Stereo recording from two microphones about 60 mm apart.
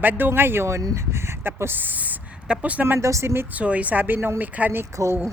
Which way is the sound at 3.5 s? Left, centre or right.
Right.